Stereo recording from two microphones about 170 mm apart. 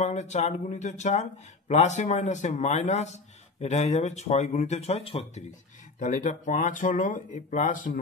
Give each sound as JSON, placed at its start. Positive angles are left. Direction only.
{"t": 0.0, "sound": "speech", "side_deg": 40}
{"t": 5.9, "sound": "speech", "side_deg": 45}